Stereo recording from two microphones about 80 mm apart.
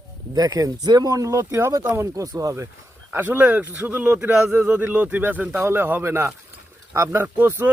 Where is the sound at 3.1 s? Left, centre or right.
Right.